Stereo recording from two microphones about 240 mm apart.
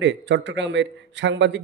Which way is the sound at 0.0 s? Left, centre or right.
Right.